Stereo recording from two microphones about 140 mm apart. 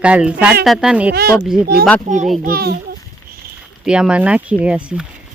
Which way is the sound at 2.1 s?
65° right (ahead or behind).